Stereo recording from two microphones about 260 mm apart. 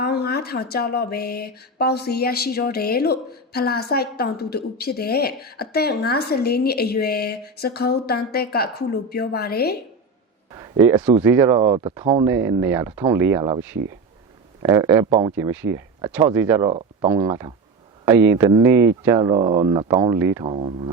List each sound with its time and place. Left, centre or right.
0.0 s speech: left
10.5 s speech: centre